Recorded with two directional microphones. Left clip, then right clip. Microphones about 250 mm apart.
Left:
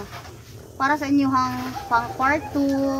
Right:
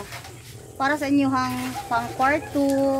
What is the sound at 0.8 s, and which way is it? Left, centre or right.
A woman's voice, centre.